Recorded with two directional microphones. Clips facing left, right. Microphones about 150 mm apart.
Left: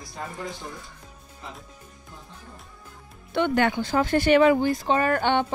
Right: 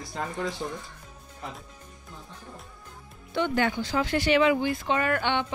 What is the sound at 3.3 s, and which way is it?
Speech, 60° left (ahead or behind).